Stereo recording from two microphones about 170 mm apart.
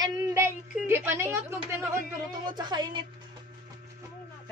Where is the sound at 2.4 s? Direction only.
25° right (ahead or behind).